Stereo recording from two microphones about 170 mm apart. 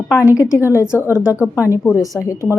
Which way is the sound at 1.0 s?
5° right (ahead or behind).